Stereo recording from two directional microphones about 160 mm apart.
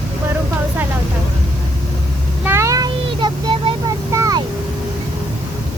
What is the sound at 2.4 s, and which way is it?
Vehicle, 15° right (ahead or behind).